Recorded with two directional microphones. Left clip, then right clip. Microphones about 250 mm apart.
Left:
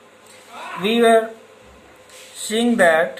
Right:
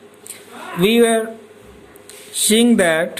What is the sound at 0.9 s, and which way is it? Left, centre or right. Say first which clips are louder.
Speech: even; right.